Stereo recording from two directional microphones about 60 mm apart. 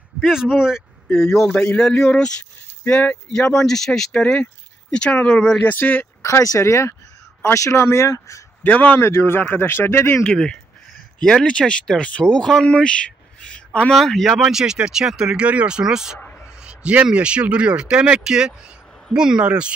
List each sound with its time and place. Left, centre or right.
0.2 s speech: centre
1.1 s speech: centre
1.5 s a man's voice: left
1.8 s speech: centre
2.9 s a man's voice: left
3.3 s speech: centre
5.7 s speech: left
6.2 s speech: left
8.6 s speech: left
10.3 s speech: centre
13.9 s speech: centre
14.3 s a man's voice: centre